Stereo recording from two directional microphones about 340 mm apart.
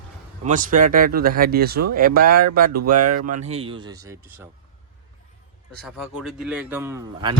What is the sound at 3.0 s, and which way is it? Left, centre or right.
Speech, right.